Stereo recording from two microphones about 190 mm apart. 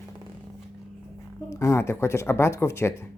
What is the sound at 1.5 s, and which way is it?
Speech, 15° left (ahead or behind).